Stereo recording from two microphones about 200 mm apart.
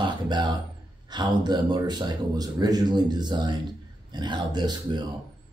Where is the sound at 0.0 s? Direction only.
20° right (ahead or behind).